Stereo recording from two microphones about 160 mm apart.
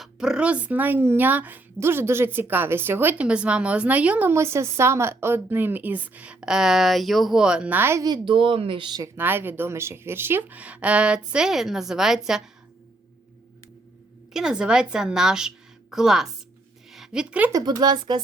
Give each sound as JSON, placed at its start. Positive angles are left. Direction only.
{"t": 0.0, "sound": "speech", "side_deg": -5}
{"t": 9.1, "sound": "speech", "side_deg": -15}
{"t": 14.3, "sound": "a woman's voice", "side_deg": -5}
{"t": 17.5, "sound": "speech", "side_deg": -25}